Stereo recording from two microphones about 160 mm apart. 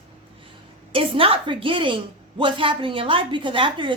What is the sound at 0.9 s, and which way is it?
A woman's voice, 35° right (ahead or behind).